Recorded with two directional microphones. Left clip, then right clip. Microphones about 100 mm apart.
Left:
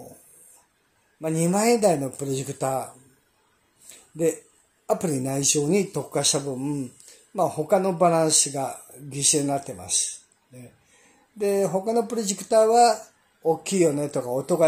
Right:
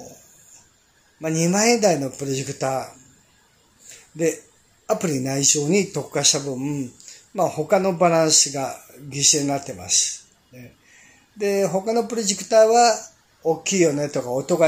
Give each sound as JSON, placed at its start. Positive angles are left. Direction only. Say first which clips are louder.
{"t": 1.2, "sound": "speech", "louder": "right 3 dB", "side_deg": 30}
{"t": 4.8, "sound": "speech", "louder": "right 2 dB", "side_deg": 30}